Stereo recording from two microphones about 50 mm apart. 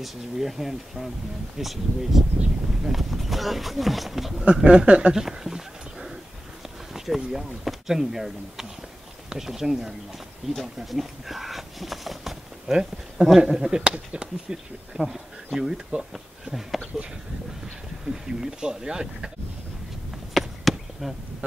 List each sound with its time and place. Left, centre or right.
0.0 s speech: centre
4.5 s speech: centre
5.1 s a sound: centre
6.9 s speech: centre
10.6 s a sound: centre
12.7 s speech: centre
18.0 s speech: centre
20.3 s chop: centre